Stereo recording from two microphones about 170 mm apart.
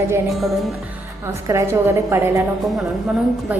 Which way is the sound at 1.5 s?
15° right (ahead or behind).